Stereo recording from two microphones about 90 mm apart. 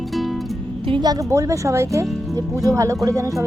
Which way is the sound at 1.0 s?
40° right (ahead or behind).